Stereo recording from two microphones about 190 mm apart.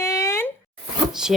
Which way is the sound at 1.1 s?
5° right (ahead or behind).